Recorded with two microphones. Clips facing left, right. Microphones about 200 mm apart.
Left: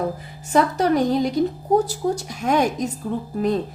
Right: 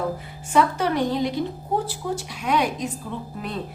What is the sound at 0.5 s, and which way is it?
A woman's voice, 40° left (ahead or behind).